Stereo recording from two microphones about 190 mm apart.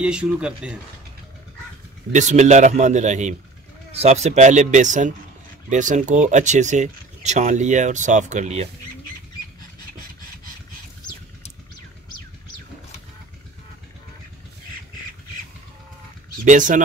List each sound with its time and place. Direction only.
0.0 s speech: 5° right (ahead or behind)
2.1 s speech: 40° right (ahead or behind)
16.4 s speech: 40° right (ahead or behind)